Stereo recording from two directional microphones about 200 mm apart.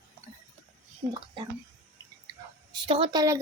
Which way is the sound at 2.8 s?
25° right (ahead or behind).